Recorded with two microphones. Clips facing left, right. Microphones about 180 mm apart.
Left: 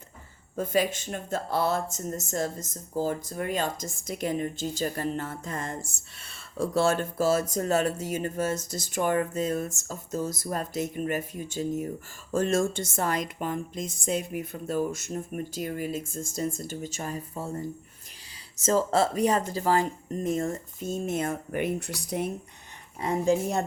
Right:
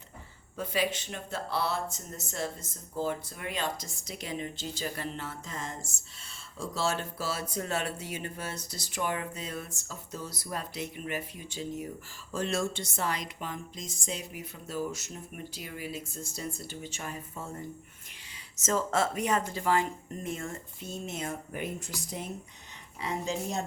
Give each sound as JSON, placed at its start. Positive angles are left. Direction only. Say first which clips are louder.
{"t": 0.5, "sound": "speech", "louder": "left 5 dB", "side_deg": 45}
{"t": 23.0, "sound": "speech", "louder": "left 9 dB", "side_deg": 50}